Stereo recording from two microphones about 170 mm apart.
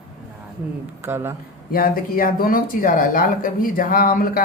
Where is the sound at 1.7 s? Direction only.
60° left (ahead or behind).